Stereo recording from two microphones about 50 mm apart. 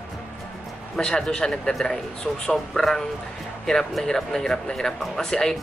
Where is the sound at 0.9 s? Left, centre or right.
Centre.